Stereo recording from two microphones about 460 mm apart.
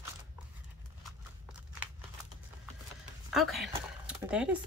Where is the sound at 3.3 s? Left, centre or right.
Centre.